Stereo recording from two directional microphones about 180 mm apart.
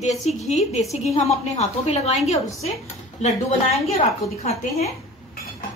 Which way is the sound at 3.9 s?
35° left (ahead or behind).